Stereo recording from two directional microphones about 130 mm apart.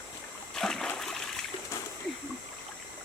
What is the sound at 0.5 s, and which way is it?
Splash, 5° left (ahead or behind).